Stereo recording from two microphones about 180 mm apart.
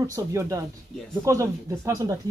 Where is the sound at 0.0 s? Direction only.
15° right (ahead or behind).